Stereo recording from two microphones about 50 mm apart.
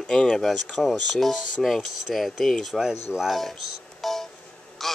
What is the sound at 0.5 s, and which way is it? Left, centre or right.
Speech, centre.